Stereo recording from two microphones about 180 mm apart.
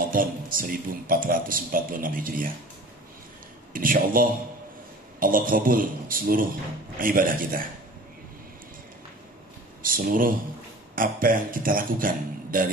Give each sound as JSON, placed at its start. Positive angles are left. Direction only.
{"t": 0.1, "sound": "speech", "side_deg": -50}
{"t": 3.7, "sound": "speech", "side_deg": -50}
{"t": 9.8, "sound": "speech", "side_deg": -50}